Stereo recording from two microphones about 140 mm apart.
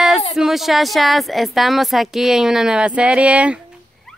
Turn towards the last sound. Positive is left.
turn(degrees=-10)  # may be behind; listen again after turning